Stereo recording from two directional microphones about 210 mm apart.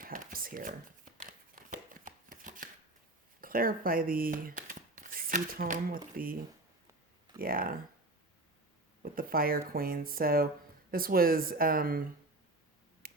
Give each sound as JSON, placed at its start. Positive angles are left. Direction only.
{"t": 0.0, "sound": "shuffling cards", "side_deg": -40}
{"t": 3.4, "sound": "speech", "side_deg": -45}
{"t": 9.1, "sound": "speech", "side_deg": -45}
{"t": 13.0, "sound": "finger snapping", "side_deg": -45}